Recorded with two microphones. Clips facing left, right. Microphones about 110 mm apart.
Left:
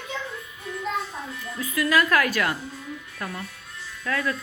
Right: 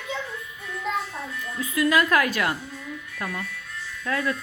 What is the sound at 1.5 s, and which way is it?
Music, 20° right (ahead or behind).